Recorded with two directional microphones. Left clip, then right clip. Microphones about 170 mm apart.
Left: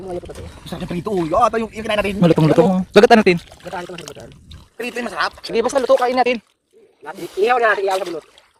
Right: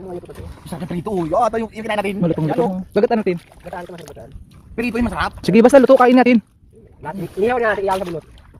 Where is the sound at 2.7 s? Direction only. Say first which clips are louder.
Left 7 dB; 30° left (ahead or behind).